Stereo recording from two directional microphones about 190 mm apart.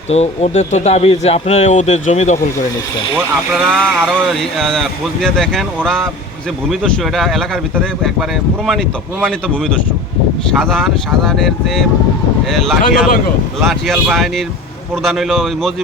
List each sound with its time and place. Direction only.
0.1 s speech: 35° left (ahead or behind)
3.5 s speech: centre (ahead or behind)
10.5 s speech: centre (ahead or behind)